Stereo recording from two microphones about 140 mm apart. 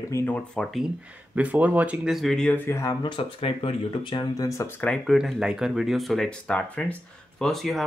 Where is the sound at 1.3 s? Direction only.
10° right (ahead or behind); by 2.6 s 5° left (ahead or behind).